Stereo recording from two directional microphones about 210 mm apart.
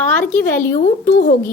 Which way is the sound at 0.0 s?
10° left (ahead or behind).